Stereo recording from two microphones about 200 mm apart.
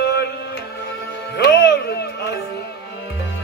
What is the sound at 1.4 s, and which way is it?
Music, 55° left (ahead or behind).